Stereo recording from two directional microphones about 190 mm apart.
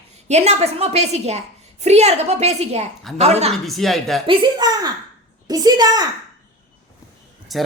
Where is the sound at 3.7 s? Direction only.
Centre (ahead or behind).